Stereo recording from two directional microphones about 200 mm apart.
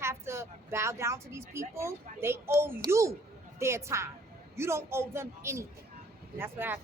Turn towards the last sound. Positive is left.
turn(degrees=-10)  # may be behind; listen again after turning